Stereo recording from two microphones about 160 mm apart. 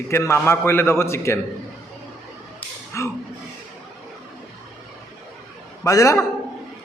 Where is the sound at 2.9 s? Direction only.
15° left (ahead or behind).